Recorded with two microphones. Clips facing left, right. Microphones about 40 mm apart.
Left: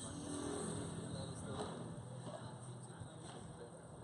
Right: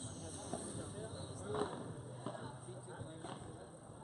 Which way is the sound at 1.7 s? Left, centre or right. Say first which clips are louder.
Right 2 dB; right.